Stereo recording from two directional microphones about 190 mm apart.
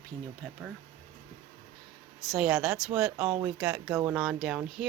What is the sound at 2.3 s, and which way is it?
Speech, 5° right (ahead or behind).